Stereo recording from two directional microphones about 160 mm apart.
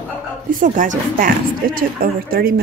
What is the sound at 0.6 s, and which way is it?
Speech, 55° right (ahead or behind).